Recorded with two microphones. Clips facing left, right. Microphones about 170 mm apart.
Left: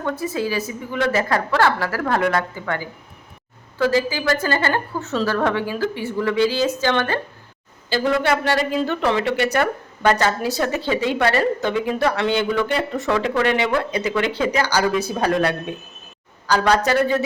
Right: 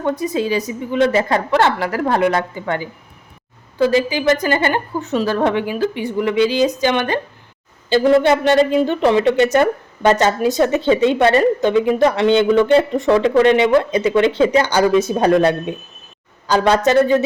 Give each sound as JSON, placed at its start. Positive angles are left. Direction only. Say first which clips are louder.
{"t": 0.0, "sound": "a woman's voice", "louder": "right 4 dB", "side_deg": -20}